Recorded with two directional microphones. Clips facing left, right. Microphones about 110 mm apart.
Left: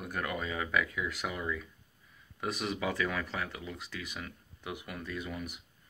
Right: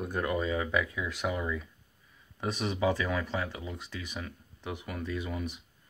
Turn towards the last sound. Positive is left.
turn(degrees=-20)  # may be behind; listen again after turning